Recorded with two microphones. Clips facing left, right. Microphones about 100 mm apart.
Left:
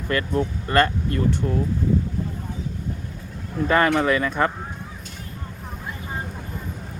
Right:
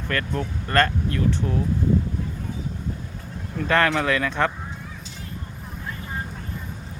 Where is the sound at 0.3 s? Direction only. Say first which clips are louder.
Left 2 dB; 15° left (ahead or behind).